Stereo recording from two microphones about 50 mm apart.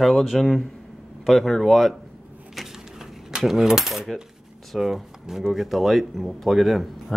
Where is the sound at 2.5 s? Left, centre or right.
Centre.